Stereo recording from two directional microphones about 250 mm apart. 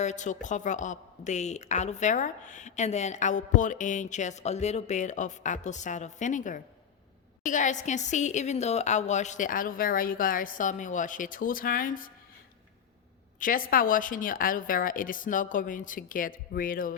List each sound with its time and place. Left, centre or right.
0.0 s a woman's voice: left
13.4 s a woman's voice: left